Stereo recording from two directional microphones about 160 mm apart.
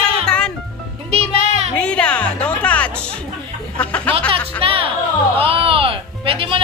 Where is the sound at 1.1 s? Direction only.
40° right (ahead or behind).